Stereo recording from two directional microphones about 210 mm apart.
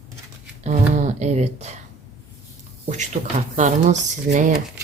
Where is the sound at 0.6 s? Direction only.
35° right (ahead or behind).